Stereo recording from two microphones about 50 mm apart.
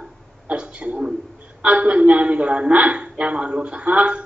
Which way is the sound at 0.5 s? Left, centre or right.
Right.